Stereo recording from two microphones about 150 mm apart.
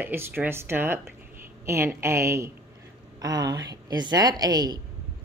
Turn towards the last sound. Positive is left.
turn(degrees=-25)  # may be behind; listen again after turning